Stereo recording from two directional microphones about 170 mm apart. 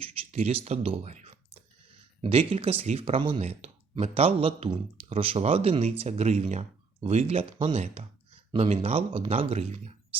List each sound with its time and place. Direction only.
0.0 s speech: 40° right (ahead or behind)